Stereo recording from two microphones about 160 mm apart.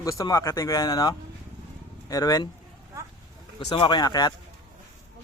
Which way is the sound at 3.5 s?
30° left (ahead or behind).